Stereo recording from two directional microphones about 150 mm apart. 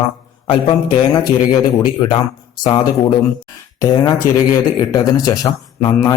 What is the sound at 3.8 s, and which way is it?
Speech, 25° left (ahead or behind).